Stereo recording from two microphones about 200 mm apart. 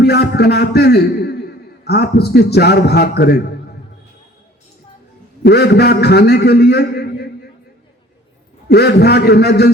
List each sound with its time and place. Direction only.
0.0 s a man's voice: 55° left (ahead or behind)
5.4 s a man's voice: 55° left (ahead or behind)
8.7 s a man's voice: 55° left (ahead or behind)